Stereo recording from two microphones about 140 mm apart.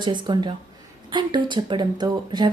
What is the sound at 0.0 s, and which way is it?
Speech, 35° right (ahead or behind).